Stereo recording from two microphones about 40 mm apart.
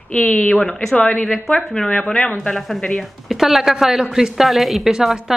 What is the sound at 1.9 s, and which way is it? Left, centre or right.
Speech, left.